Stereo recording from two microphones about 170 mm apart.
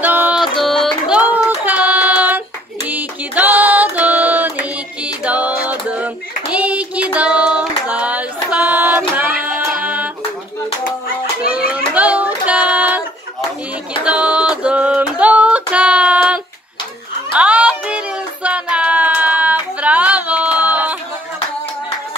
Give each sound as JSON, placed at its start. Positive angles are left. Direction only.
{"t": 0.0, "sound": "music", "side_deg": -10}
{"t": 11.4, "sound": "child singing", "side_deg": -5}
{"t": 14.0, "sound": "a sound", "side_deg": -5}
{"t": 17.4, "sound": "music", "side_deg": -5}